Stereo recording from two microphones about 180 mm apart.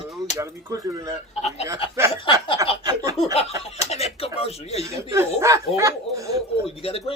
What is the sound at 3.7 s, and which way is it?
Speech, 35° left (ahead or behind).